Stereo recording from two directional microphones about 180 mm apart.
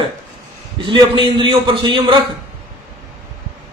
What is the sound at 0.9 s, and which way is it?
A man's voice, 25° right (ahead or behind).